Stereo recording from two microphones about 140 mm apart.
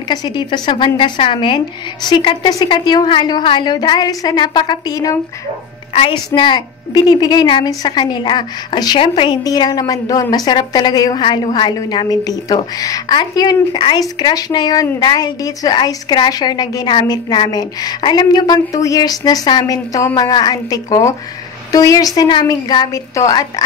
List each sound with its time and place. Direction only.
0.1 s a woman's voice: 30° left (ahead or behind)
5.9 s a woman's voice: 40° left (ahead or behind)
9.4 s a woman's voice: 30° left (ahead or behind)